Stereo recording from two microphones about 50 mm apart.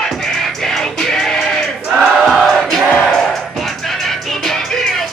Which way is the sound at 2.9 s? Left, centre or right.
Centre.